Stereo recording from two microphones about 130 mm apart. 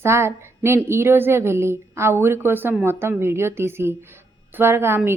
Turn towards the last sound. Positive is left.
turn(degrees=-20)  # may be behind; listen again after turning